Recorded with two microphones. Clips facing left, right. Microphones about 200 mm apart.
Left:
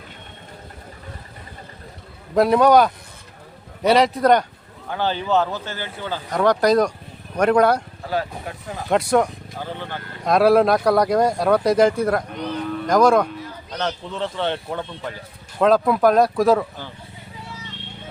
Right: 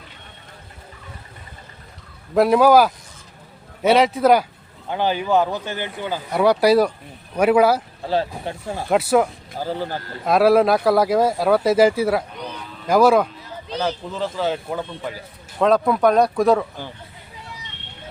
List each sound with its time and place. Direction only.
2.3 s speech: 5° right (ahead or behind)
8.0 s speech: 30° right (ahead or behind)
8.9 s speech: 5° right (ahead or behind)
9.6 s speech: 35° right (ahead or behind)
10.2 s speech: centre (ahead or behind)